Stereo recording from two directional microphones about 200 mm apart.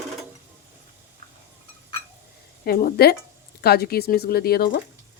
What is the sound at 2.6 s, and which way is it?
Speech, 50° left (ahead or behind).